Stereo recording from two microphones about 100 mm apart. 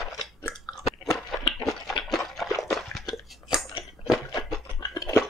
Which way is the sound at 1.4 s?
Centre (ahead or behind).